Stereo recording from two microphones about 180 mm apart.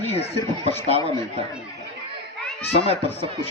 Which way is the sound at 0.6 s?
30° right (ahead or behind).